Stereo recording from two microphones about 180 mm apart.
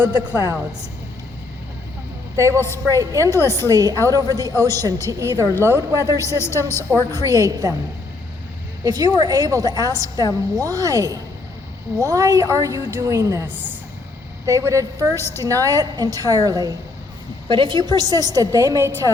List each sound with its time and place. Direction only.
0.0 s a woman's voice: 10° right (ahead or behind)
2.3 s a woman's voice: 15° right (ahead or behind)
2.6 s a woman's voice: 15° left (ahead or behind)
2.9 s a woman's voice: 20° right (ahead or behind)
3.2 s a woman's voice: 15° left (ahead or behind)
3.6 s a woman's voice: 20° right (ahead or behind)
6.2 s a woman's voice: 15° left (ahead or behind)
7.2 s a woman's voice: 20° right (ahead or behind)
8.8 s a woman's voice: 20° right (ahead or behind)
15.1 s a woman's voice: 15° left (ahead or behind)
15.4 s a woman's voice: 20° right (ahead or behind)